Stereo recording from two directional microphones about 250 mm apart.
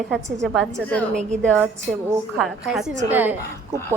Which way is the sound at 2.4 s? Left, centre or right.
Centre.